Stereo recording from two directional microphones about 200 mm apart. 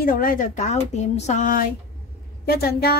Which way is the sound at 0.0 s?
45° left (ahead or behind).